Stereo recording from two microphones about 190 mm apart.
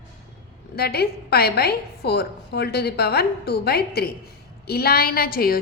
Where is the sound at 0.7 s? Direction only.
55° left (ahead or behind).